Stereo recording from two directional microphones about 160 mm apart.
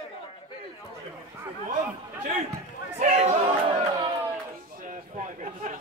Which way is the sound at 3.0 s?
40° right (ahead or behind).